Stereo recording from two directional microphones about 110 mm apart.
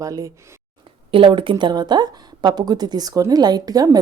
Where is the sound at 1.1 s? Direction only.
50° right (ahead or behind).